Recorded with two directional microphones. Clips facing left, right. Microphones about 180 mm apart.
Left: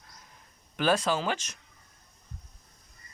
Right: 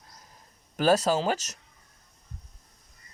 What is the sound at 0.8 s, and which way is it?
Speech, 40° right (ahead or behind).